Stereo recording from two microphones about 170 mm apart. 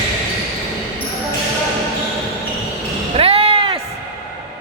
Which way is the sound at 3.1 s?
35° right (ahead or behind).